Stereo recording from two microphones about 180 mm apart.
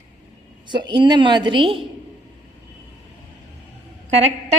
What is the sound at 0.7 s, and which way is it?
A woman's voice, 25° right (ahead or behind).